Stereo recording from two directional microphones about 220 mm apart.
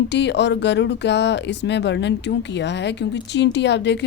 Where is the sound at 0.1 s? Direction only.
50° left (ahead or behind).